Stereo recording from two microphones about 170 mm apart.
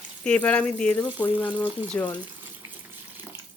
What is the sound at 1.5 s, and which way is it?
Speech, 10° right (ahead or behind).